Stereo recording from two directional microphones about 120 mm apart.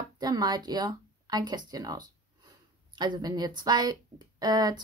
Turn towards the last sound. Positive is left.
turn(degrees=-35)  # may be behind; listen again after turning